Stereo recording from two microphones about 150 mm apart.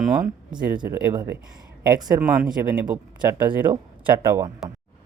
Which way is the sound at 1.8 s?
25° right (ahead or behind).